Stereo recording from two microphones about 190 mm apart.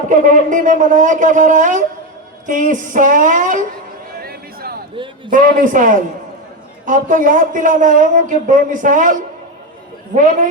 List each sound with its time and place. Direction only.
0.1 s speech: 45° right (ahead or behind)
4.2 s a sound: 55° right (ahead or behind)
5.3 s speech: 45° right (ahead or behind)